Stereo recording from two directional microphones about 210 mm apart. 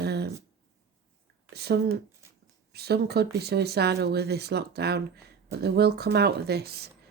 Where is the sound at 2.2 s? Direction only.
15° right (ahead or behind).